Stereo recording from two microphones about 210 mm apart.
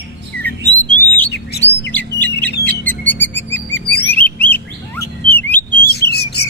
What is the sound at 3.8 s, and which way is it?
Bird, 50° left (ahead or behind).